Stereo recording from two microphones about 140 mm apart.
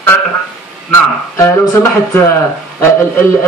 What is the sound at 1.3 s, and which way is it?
A man's voice, 20° left (ahead or behind).